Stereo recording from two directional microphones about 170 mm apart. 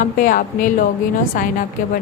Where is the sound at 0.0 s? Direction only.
50° left (ahead or behind).